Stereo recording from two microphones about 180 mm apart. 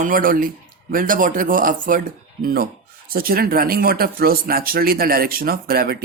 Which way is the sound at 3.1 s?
55° right (ahead or behind).